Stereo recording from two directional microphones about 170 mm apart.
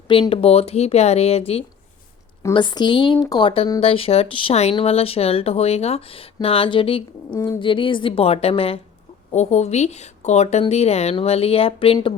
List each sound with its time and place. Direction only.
0.1 s a woman's voice: 35° left (ahead or behind)
7.3 s speech: 20° left (ahead or behind)
7.6 s speech: 30° left (ahead or behind)